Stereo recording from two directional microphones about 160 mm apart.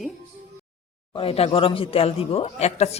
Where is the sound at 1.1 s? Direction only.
40° left (ahead or behind).